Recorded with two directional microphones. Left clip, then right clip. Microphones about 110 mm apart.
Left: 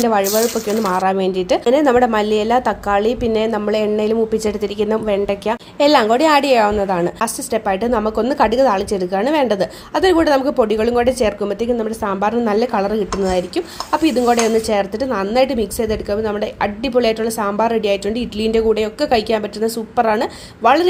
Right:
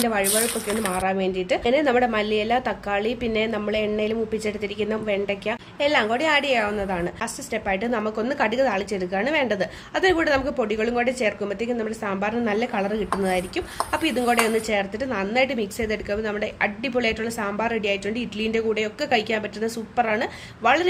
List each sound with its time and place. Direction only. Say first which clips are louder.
0.9 s a woman's voice: left 7 dB; 45° left (ahead or behind)